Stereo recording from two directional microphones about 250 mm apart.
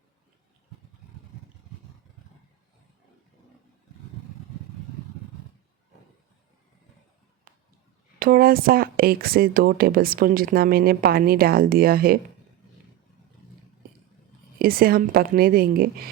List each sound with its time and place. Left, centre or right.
7.5 s a sound: right
8.2 s speech: right
14.6 s speech: right